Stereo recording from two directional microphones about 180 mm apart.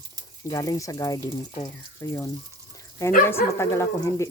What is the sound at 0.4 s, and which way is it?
Speech, 20° left (ahead or behind).